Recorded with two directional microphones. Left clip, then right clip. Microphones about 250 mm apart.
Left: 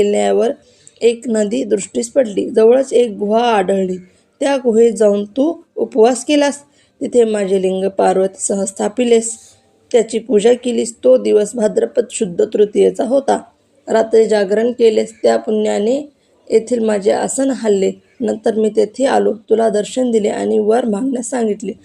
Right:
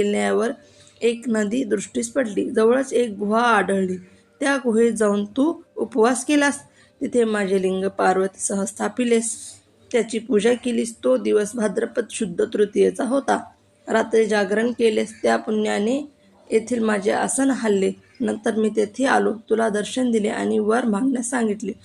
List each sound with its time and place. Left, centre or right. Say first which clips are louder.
0.0 s a woman's voice: left 7 dB; centre